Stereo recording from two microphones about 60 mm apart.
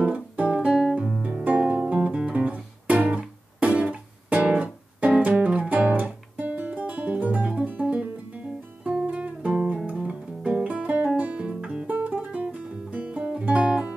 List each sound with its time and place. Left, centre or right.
0.0 s guitar: right
1.2 s guitar: right
7.4 s music: centre
11.9 s guitar: right